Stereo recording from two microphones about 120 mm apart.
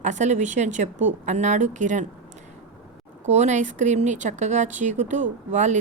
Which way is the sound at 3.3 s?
85° right.